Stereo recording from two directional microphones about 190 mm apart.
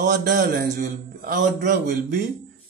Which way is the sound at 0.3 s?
50° right (ahead or behind).